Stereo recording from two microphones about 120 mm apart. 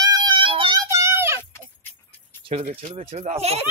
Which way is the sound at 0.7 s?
25° right (ahead or behind).